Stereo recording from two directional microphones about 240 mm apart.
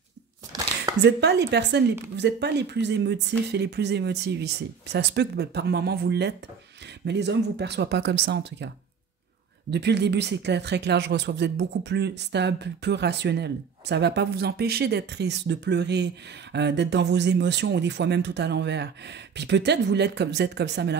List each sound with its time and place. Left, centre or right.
1.0 s speech: right
9.7 s speech: right